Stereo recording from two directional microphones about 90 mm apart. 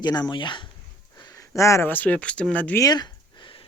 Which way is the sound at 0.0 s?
55° left (ahead or behind).